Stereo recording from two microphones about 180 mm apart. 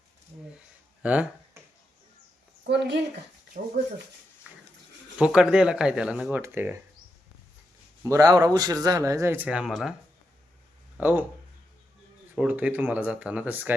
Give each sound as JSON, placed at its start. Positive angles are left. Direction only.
{"t": 1.0, "sound": "a sound", "side_deg": -5}
{"t": 2.6, "sound": "speech", "side_deg": -70}
{"t": 4.4, "sound": "pig", "side_deg": -10}
{"t": 5.1, "sound": "speech", "side_deg": -5}
{"t": 8.0, "sound": "speech", "side_deg": -20}
{"t": 11.0, "sound": "speech", "side_deg": -10}
{"t": 12.4, "sound": "speech", "side_deg": -5}